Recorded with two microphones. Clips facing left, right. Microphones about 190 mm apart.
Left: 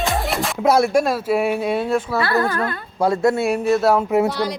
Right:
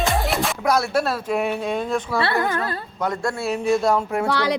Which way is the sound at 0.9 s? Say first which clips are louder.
Left 4 dB; 10° left (ahead or behind).